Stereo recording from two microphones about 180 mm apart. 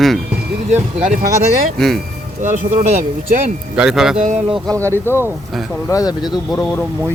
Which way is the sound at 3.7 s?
5° right (ahead or behind).